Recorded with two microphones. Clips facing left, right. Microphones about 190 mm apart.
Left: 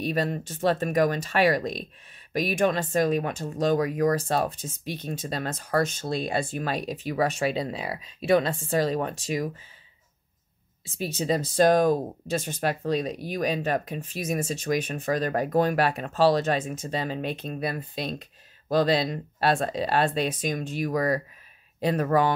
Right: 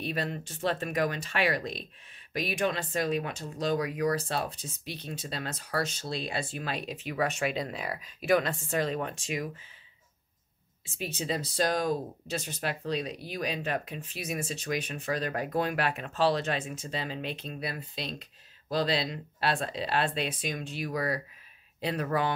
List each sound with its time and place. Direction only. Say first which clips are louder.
0.0 s speech: left 6 dB; 45° left (ahead or behind)
11.0 s speech: left 6 dB; 45° left (ahead or behind)